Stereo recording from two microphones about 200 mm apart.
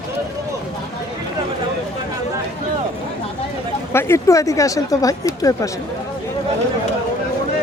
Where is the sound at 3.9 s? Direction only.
10° left (ahead or behind).